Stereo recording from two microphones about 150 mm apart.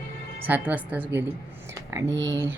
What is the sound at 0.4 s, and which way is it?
Speech, 10° right (ahead or behind).